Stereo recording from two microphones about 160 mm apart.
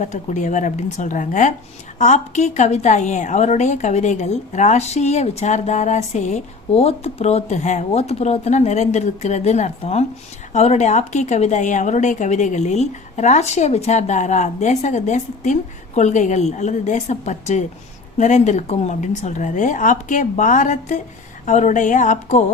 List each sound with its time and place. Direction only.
0.0 s a woman's voice: 50° left (ahead or behind)